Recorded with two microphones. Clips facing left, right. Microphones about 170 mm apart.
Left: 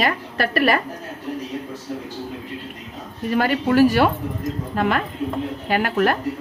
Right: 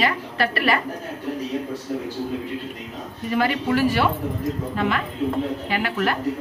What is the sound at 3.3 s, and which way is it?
Speech, 45° left (ahead or behind).